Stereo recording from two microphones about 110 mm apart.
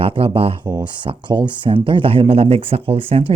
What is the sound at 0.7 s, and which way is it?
Speech, 40° right (ahead or behind).